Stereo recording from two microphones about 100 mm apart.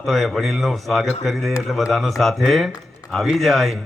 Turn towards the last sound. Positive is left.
turn(degrees=0)  # may be behind; listen again after turning